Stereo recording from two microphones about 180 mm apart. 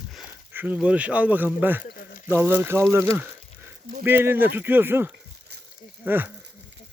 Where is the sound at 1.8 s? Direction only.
50° left (ahead or behind).